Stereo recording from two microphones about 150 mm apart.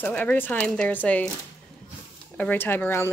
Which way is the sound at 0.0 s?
10° left (ahead or behind).